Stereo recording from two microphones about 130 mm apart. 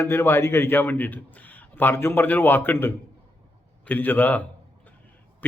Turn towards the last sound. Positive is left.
turn(degrees=15)  # may be behind; listen again after turning